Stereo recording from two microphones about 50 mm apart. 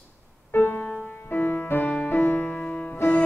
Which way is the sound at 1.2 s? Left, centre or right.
Left.